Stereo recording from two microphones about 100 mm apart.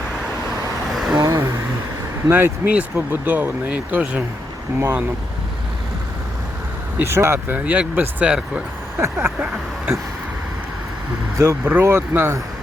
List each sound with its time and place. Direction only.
0.9 s vehicle: centre (ahead or behind)
1.2 s vehicle: 30° right (ahead or behind)
2.2 s speech: 20° right (ahead or behind)
7.0 s speech: 25° right (ahead or behind); by 8.6 s 10° right (ahead or behind)
9.0 s speech: 25° right (ahead or behind)
11.3 s speech: 30° right (ahead or behind)